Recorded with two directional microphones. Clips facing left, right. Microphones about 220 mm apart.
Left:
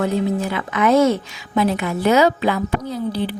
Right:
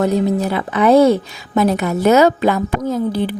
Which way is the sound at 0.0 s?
40° right (ahead or behind).